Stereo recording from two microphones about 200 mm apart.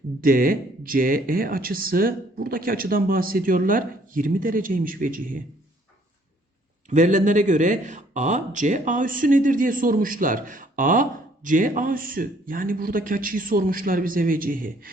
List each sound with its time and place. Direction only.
0.2 s speech: 45° right (ahead or behind)
6.9 s speech: 40° right (ahead or behind)